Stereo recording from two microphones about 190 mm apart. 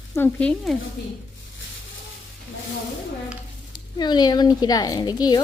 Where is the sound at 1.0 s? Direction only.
65° left (ahead or behind).